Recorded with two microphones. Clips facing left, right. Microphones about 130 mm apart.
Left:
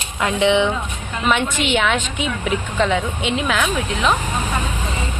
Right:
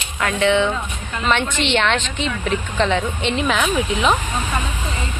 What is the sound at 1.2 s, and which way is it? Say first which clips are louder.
Speech: left 1 dB; 5° left (ahead or behind).